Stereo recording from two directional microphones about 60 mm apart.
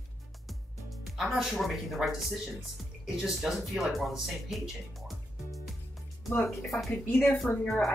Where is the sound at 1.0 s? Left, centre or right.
Centre.